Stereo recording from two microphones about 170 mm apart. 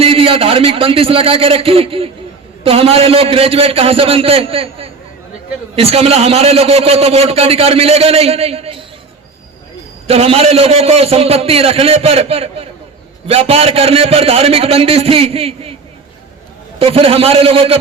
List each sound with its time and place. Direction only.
0.0 s a man's voice: 35° right (ahead or behind)
10.1 s a man's voice: 35° right (ahead or behind)
16.7 s a man's voice: 35° right (ahead or behind)